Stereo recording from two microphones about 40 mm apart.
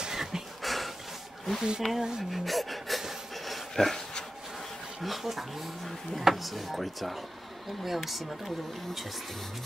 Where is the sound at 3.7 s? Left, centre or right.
Centre.